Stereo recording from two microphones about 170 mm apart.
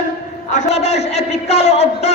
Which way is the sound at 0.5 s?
40° left (ahead or behind).